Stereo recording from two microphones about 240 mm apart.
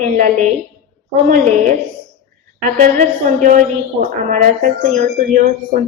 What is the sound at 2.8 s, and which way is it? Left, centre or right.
A woman's voice, right.